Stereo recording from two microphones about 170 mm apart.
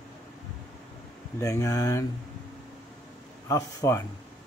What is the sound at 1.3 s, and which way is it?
Speech, 20° left (ahead or behind).